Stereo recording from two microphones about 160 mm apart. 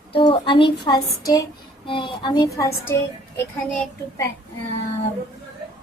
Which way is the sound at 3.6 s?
5° left (ahead or behind).